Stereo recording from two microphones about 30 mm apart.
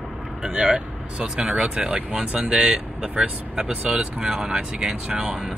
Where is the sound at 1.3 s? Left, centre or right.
Right.